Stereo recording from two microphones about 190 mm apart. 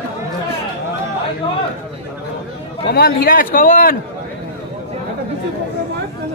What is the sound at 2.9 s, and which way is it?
A man's voice, 50° left (ahead or behind).